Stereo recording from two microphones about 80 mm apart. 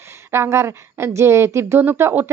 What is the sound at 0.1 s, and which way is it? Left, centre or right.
Speech, right.